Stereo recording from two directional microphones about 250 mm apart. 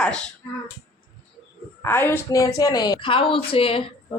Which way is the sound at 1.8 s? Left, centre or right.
Centre.